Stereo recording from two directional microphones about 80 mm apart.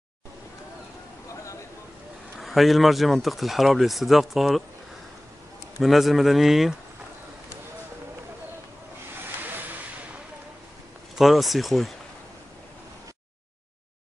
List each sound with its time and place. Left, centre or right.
1.3 s a sound: left
2.3 s speech: centre
5.8 s speech: centre
11.1 s speech: centre